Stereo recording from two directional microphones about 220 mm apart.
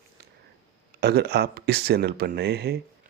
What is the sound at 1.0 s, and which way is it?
Speech, 45° right (ahead or behind).